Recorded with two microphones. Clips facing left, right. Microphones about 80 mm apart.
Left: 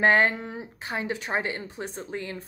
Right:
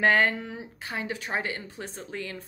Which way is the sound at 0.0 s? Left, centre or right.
Left.